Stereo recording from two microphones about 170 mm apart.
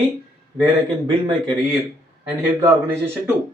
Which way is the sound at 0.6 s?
25° right (ahead or behind).